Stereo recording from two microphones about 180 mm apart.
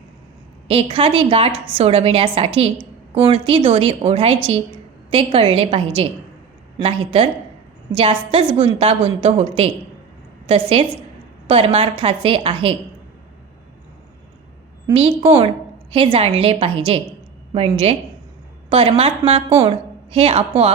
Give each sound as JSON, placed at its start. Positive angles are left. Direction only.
{"t": 0.7, "sound": "a woman's voice", "side_deg": -30}
{"t": 15.2, "sound": "a woman's voice", "side_deg": -30}